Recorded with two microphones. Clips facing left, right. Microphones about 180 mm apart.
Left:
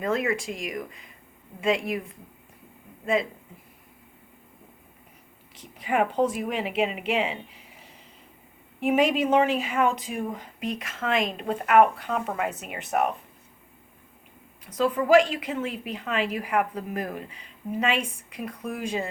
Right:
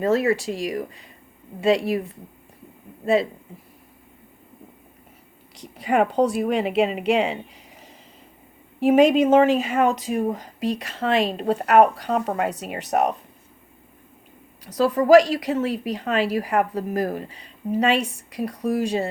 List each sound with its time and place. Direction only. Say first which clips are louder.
0.0 s speech: right 6 dB; 35° right (ahead or behind)
5.5 s speech: right 5 dB; 40° right (ahead or behind)
8.8 s speech: right 7 dB; 40° right (ahead or behind)
14.8 s speech: right 5 dB; 35° right (ahead or behind)